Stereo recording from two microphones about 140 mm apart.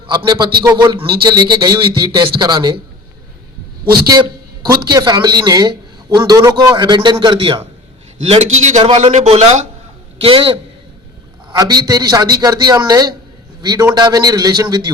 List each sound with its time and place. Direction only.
0.0 s speech: 35° right (ahead or behind)
4.0 s a man's voice: 30° right (ahead or behind)
8.2 s a man's voice: 50° right (ahead or behind)
10.2 s speech: 40° right (ahead or behind)
11.5 s a man's voice: 30° right (ahead or behind)